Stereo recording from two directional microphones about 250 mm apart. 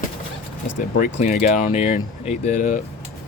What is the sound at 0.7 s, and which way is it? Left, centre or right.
Speech, left.